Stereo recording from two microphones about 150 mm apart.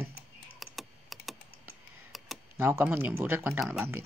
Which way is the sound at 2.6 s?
15° right (ahead or behind).